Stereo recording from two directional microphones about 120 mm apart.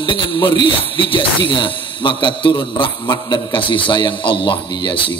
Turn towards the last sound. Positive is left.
turn(degrees=45)  # may be behind; listen again after turning